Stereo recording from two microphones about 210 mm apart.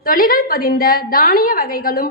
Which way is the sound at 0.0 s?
40° left (ahead or behind).